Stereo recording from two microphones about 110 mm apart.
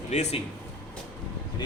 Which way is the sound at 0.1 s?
90° left.